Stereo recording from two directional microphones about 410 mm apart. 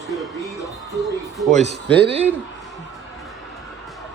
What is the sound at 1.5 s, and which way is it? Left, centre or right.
Speech, centre.